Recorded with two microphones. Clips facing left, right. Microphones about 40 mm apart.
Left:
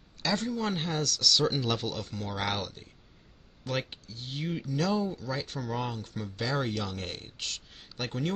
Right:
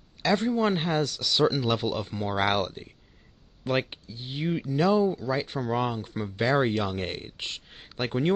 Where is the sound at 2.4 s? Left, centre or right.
Right.